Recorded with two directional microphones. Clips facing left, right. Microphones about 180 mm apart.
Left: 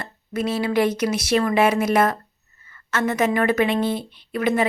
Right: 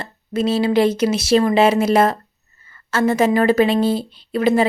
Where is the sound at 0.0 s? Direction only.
25° right (ahead or behind).